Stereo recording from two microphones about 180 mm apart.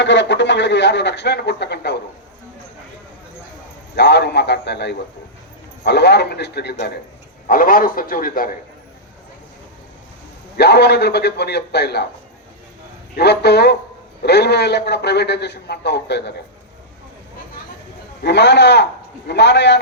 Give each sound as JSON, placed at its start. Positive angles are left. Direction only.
{"t": 0.0, "sound": "speech", "side_deg": 85}
{"t": 3.9, "sound": "a man's voice", "side_deg": 65}
{"t": 7.4, "sound": "a man's voice", "side_deg": 50}
{"t": 10.6, "sound": "a man's voice", "side_deg": 65}
{"t": 13.1, "sound": "a man's voice", "side_deg": 65}
{"t": 18.2, "sound": "a man's voice", "side_deg": 70}